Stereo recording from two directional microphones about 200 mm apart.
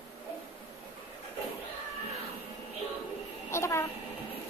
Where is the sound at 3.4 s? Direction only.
15° left (ahead or behind).